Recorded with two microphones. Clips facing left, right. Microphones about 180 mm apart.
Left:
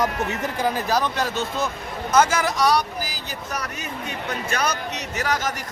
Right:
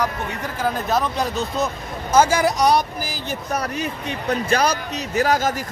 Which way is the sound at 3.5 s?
30° right (ahead or behind).